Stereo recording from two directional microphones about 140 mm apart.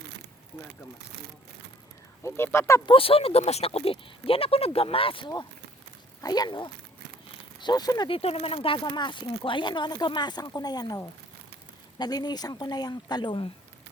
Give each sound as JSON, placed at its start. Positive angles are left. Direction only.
{"t": 2.2, "sound": "speech", "side_deg": 15}
{"t": 2.8, "sound": "speech", "side_deg": 40}
{"t": 8.1, "sound": "speech", "side_deg": 45}